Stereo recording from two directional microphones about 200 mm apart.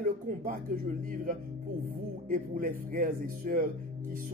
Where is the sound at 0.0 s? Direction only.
40° right (ahead or behind).